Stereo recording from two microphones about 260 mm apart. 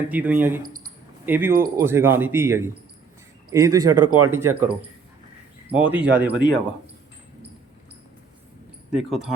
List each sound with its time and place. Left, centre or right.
0.1 s speech: centre
1.5 s speech: right
1.8 s speech: centre
3.9 s speech: right
4.3 s speech: centre
5.7 s speech: centre
8.9 s speech: centre